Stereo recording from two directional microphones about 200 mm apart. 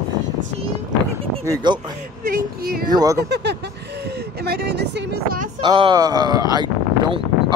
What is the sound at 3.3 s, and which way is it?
Speech, 55° right (ahead or behind).